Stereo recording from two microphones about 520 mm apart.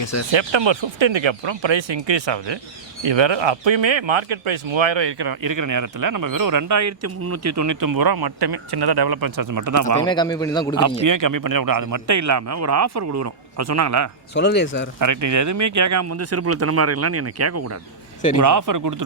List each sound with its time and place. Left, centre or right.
0.0 s speech: left
0.3 s a man's voice: right
10.0 s a man's voice: centre
11.0 s a man's voice: right
14.3 s speech: centre
14.9 s a man's voice: right